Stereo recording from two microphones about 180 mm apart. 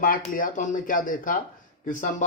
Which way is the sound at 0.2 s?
45° left (ahead or behind).